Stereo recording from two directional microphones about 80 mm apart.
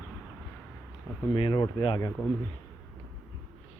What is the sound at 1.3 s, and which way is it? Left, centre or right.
Speech, left.